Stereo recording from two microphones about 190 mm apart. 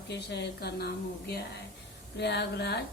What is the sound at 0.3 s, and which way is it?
A woman's voice, 60° left (ahead or behind).